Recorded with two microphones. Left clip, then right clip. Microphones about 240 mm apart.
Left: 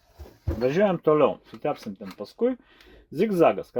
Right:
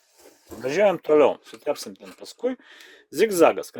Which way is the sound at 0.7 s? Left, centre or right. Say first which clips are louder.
Right 2 dB; right.